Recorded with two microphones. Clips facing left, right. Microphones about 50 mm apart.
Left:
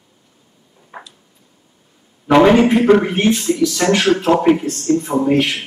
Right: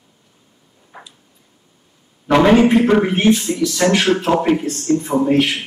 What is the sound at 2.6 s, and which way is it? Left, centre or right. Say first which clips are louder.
Speech: left 1 dB; centre.